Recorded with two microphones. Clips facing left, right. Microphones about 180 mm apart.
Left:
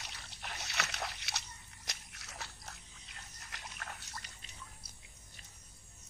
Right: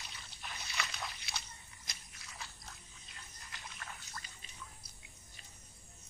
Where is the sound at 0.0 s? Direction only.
75° left (ahead or behind).